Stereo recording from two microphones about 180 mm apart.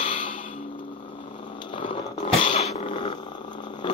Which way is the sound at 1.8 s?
35° left (ahead or behind).